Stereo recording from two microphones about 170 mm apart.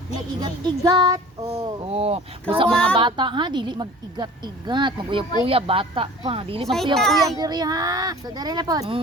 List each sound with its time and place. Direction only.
0.3 s a woman's voice: 25° right (ahead or behind)
1.9 s speech: 35° right (ahead or behind)
2.6 s a child's voice: 5° left (ahead or behind)
2.9 s a woman's voice: 30° right (ahead or behind)
6.9 s a child's voice: centre (ahead or behind)
7.3 s a woman's voice: 20° right (ahead or behind)